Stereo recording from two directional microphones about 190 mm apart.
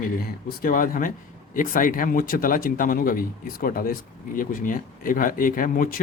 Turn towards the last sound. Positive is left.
turn(degrees=45)  # may be behind; listen again after turning